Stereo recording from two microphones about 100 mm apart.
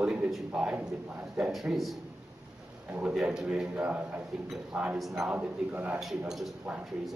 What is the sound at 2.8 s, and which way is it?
A man's voice, 15° right (ahead or behind).